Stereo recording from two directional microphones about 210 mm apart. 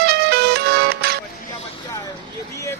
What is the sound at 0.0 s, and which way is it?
Music, 50° right (ahead or behind).